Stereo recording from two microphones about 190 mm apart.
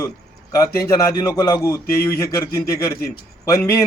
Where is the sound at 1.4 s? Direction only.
20° left (ahead or behind).